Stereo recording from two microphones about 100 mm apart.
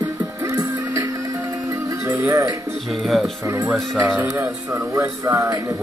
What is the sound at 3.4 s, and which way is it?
Speech, 30° right (ahead or behind).